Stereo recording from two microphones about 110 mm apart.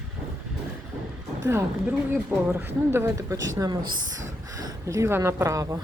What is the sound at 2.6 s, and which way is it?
Speech, 20° right (ahead or behind).